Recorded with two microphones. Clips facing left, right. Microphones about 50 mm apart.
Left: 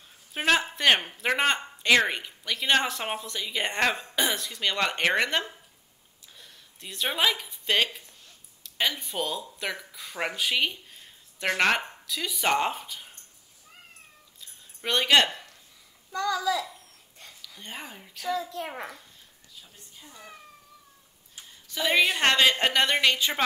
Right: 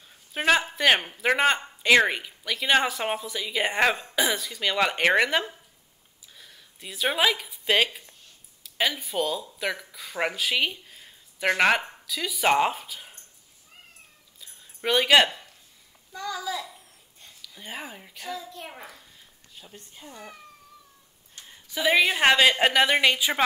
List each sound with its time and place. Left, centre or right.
0.3 s speech: centre
14.4 s a sound: centre
16.1 s a child's voice: left
17.4 s speech: centre
19.6 s speech: right
21.6 s a woman's voice: centre